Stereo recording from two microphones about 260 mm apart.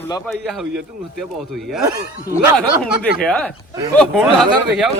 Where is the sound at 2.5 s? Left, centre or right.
Centre.